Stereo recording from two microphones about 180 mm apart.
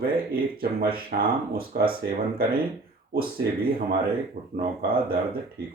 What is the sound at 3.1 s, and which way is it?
Speech, 55° right (ahead or behind).